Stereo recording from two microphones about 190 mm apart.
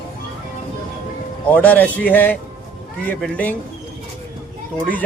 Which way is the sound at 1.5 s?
10° left (ahead or behind).